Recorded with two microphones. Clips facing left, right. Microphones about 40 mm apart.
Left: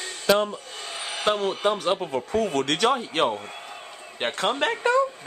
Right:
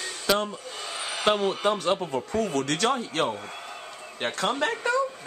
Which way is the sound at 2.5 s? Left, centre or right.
Left.